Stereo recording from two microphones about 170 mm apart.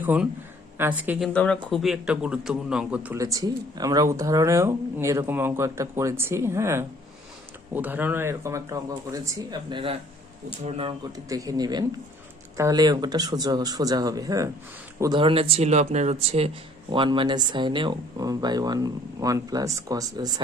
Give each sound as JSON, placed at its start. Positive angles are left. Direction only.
{"t": 0.0, "sound": "speech", "side_deg": -10}
{"t": 1.2, "sound": "a man's voice", "side_deg": 5}
{"t": 3.2, "sound": "speech", "side_deg": -20}
{"t": 11.3, "sound": "speech", "side_deg": -20}
{"t": 15.2, "sound": "speech", "side_deg": -35}